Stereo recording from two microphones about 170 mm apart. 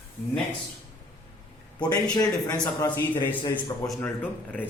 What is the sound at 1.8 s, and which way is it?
Speech, 25° left (ahead or behind).